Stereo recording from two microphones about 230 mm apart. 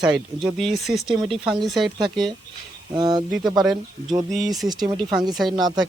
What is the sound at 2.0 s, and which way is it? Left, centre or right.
Speech, centre.